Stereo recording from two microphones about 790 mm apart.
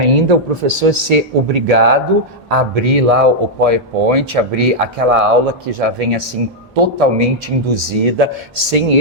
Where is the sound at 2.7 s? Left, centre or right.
Right.